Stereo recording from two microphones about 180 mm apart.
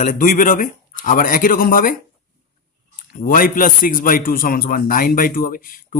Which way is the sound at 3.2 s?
50° left (ahead or behind).